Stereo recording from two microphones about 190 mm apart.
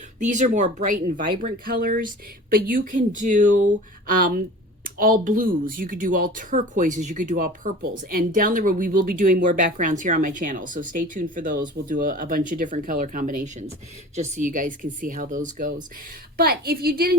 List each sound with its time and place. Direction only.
0.3 s speech: 40° right (ahead or behind)